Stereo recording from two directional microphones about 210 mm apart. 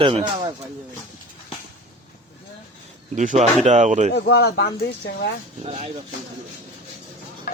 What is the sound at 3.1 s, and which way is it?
Speech, 35° right (ahead or behind).